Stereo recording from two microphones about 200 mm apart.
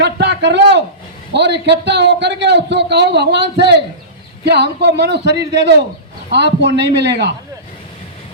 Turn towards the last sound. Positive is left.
turn(degrees=-55)  # may be behind; listen again after turning